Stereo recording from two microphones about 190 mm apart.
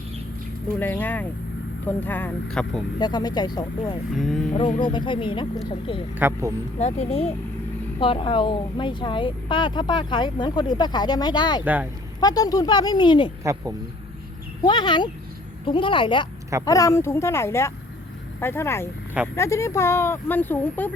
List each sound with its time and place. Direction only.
0.8 s speech: 10° left (ahead or behind)
3.0 s speech: 20° left (ahead or behind)
4.1 s speech: centre (ahead or behind)
4.8 s speech: 25° left (ahead or behind)
6.1 s speech: 10° right (ahead or behind)
6.7 s speech: 35° left (ahead or behind)
11.6 s speech: 10° right (ahead or behind)
12.2 s speech: 20° left (ahead or behind)
13.4 s speech: 15° right (ahead or behind)
14.6 s speech: 25° left (ahead or behind)